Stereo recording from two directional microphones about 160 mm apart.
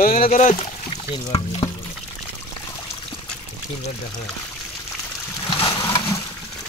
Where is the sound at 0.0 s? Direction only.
60° left (ahead or behind).